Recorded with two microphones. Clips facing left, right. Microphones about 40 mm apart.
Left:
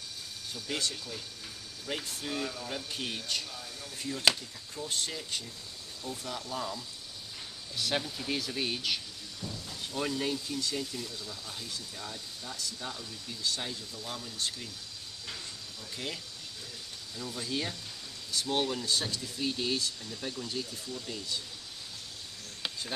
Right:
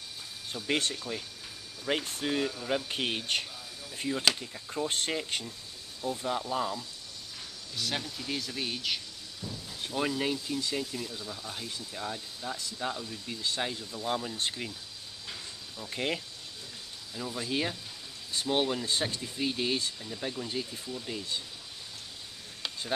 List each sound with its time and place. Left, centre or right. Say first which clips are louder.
0.7 s speech: right 5 dB; right
6.0 s speech: right 7 dB; right
7.7 s speech: left 2 dB; centre
9.9 s speech: right 2 dB; centre
15.8 s speech: right 7 dB; right
17.1 s speech: right 3 dB; centre
18.9 s speech: right 1 dB; right